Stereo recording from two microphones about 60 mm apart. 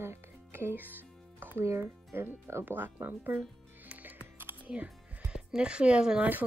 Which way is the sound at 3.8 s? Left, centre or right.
Right.